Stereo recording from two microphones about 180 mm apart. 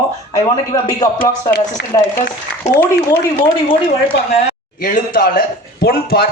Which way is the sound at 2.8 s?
15° left (ahead or behind).